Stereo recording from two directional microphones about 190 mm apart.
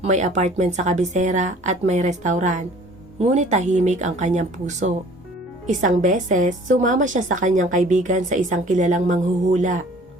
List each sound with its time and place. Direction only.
0.0 s a woman's voice: 40° right (ahead or behind)